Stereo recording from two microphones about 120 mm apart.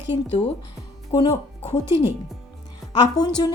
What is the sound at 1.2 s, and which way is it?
Speech, 50° left (ahead or behind).